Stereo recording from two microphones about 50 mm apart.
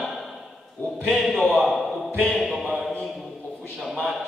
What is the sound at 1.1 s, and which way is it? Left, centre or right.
Speech, centre.